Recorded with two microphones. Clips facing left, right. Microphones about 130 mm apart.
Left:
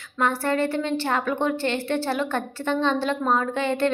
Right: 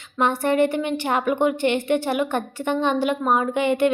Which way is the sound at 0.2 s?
20° right (ahead or behind).